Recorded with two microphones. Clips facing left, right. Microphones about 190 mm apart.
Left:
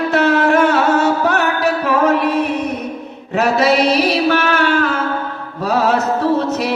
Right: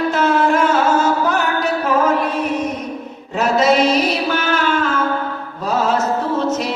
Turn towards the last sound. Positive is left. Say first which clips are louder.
# left 3 dB
turn(degrees=65)  # may be behind; listen again after turning